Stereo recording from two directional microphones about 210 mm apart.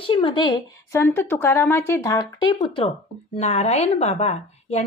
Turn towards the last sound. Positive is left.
turn(degrees=30)  # may be behind; listen again after turning